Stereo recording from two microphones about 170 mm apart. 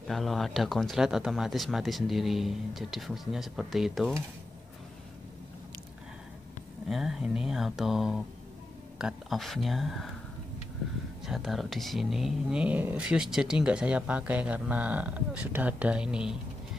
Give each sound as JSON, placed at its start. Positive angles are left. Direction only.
{"t": 0.0, "sound": "speech", "side_deg": 0}
{"t": 6.9, "sound": "speech", "side_deg": -5}
{"t": 11.2, "sound": "speech", "side_deg": 0}